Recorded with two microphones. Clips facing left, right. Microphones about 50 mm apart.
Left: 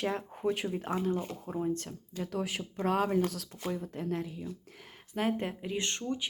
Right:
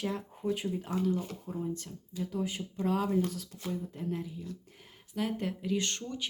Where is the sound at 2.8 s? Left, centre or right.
Left.